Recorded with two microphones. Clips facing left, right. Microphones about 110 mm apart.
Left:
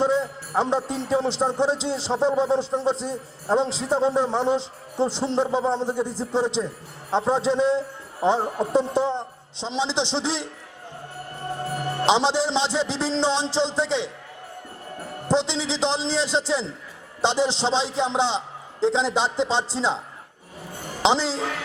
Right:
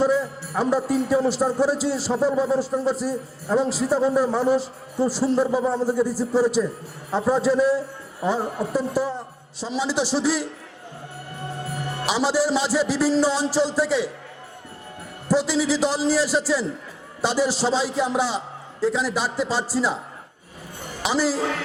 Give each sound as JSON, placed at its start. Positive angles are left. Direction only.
{"t": 0.0, "sound": "a man's voice", "side_deg": 25}
{"t": 12.0, "sound": "a man's voice", "side_deg": 25}
{"t": 15.3, "sound": "a man's voice", "side_deg": 25}
{"t": 21.0, "sound": "a woman's voice", "side_deg": 25}